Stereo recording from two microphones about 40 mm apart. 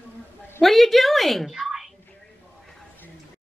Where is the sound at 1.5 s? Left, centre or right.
Centre.